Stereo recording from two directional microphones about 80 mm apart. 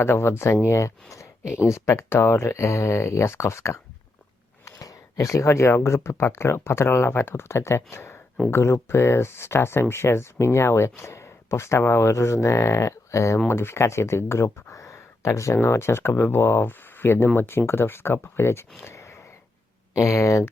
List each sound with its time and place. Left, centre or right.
0.0 s speech: left
4.6 s speech: left
18.9 s a sound: left
20.0 s speech: left